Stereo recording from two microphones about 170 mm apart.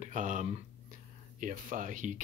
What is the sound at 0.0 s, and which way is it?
Speech, 45° right (ahead or behind).